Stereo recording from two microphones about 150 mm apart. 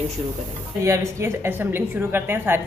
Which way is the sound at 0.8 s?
20° right (ahead or behind).